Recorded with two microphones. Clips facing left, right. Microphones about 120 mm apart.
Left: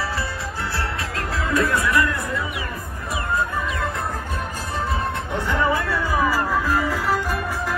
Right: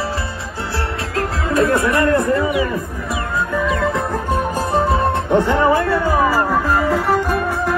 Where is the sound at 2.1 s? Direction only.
85° right.